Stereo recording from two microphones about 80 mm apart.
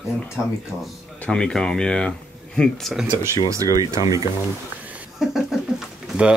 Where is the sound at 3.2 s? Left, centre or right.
Right.